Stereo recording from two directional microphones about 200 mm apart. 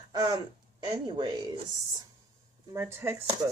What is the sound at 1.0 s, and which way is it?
Speech, 20° right (ahead or behind).